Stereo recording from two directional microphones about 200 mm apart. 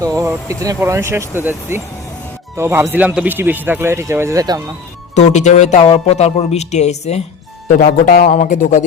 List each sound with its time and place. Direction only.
0.0 s speech: 15° right (ahead or behind)
5.1 s speech: 35° left (ahead or behind)